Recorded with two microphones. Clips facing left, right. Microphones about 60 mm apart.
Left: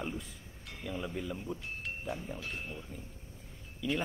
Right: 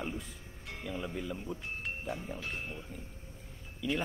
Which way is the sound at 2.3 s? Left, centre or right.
Right.